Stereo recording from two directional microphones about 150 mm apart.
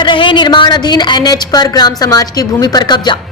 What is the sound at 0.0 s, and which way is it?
A woman's voice, 35° left (ahead or behind).